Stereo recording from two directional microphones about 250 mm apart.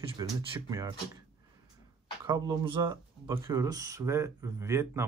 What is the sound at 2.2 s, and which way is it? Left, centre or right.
Speech, centre.